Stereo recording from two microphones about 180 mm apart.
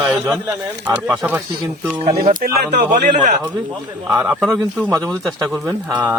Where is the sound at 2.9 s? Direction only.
45° right (ahead or behind).